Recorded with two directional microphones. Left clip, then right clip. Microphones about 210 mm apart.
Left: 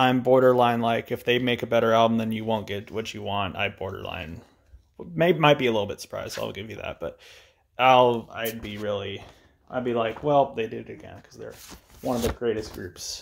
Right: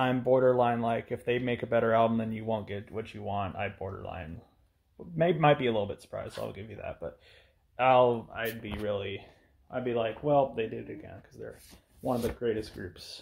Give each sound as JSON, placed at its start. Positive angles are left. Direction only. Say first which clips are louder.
{"t": 0.2, "sound": "speech", "louder": "left 4 dB", "side_deg": 30}
{"t": 8.3, "sound": "speech", "louder": "left 4 dB", "side_deg": 10}
{"t": 9.7, "sound": "speech", "louder": "left 5 dB", "side_deg": 25}
{"t": 12.4, "sound": "speech", "louder": "left 4 dB", "side_deg": -10}
{"t": 12.9, "sound": "speech", "louder": "left 9 dB", "side_deg": 10}